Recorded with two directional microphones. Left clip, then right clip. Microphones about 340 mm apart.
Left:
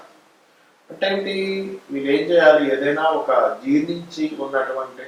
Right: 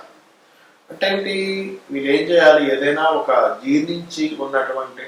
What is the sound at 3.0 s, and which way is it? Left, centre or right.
A man's voice, centre.